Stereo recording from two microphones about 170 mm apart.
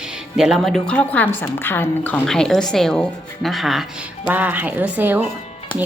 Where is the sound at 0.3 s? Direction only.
Centre (ahead or behind).